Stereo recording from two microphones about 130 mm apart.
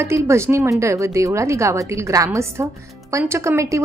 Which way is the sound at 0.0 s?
20° right (ahead or behind).